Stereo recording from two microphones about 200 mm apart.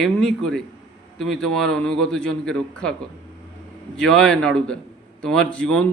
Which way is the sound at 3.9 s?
5° left (ahead or behind).